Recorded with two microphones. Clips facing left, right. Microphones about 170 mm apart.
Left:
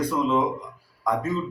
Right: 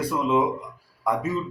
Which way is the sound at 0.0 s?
10° right (ahead or behind).